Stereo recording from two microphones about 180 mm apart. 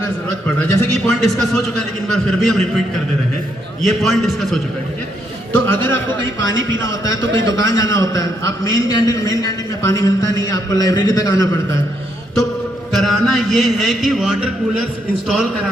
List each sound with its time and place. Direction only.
0.6 s a man's voice: 5° left (ahead or behind)
3.8 s a man's voice: centre (ahead or behind)
5.5 s a man's voice: 10° left (ahead or behind)
6.2 s speech: 90° right
6.7 s a man's voice: 15° left (ahead or behind)
12.9 s a man's voice: centre (ahead or behind)